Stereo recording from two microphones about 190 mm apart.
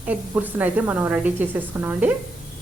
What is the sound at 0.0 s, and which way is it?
A woman's voice, 10° right (ahead or behind).